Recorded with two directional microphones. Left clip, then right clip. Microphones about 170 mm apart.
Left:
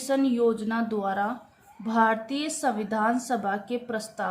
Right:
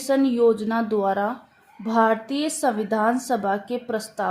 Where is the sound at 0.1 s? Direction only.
50° right (ahead or behind).